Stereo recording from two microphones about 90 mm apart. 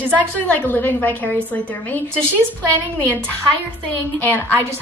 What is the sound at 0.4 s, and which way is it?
A woman's voice, 20° left (ahead or behind).